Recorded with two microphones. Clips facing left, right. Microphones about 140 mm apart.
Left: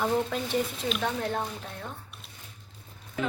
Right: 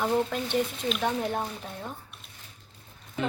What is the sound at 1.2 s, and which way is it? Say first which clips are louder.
Speech: right 1 dB; 10° right (ahead or behind).